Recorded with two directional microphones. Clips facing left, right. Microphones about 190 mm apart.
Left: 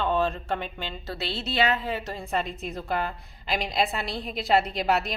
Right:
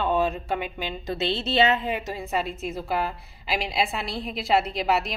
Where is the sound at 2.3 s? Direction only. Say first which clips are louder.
Right 1 dB; centre (ahead or behind).